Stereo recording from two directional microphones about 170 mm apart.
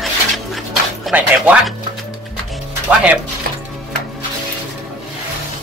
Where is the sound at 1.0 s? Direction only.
5° right (ahead or behind).